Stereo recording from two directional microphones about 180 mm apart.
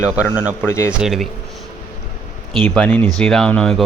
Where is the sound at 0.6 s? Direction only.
15° left (ahead or behind).